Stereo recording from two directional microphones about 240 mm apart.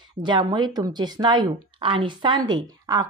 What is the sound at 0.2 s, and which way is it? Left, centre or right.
Speech, centre.